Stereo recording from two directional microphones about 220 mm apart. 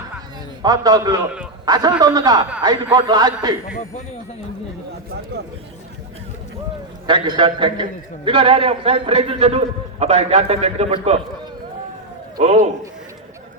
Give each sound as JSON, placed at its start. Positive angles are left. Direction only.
{"t": 0.6, "sound": "a man's voice", "side_deg": -15}
{"t": 7.1, "sound": "a man's voice", "side_deg": -20}
{"t": 12.4, "sound": "a man's voice", "side_deg": -30}